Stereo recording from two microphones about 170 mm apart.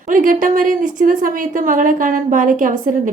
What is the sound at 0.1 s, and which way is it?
A woman's voice, 50° right (ahead or behind).